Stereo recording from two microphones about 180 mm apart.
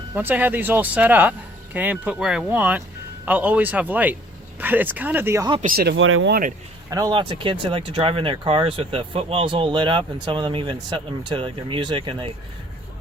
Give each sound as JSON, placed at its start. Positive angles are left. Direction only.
{"t": 0.1, "sound": "speech", "side_deg": -10}
{"t": 5.6, "sound": "speech", "side_deg": -60}
{"t": 6.9, "sound": "speech", "side_deg": -25}